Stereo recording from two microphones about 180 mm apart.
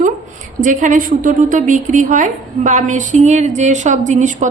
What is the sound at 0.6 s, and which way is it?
A woman's voice, 45° right (ahead or behind).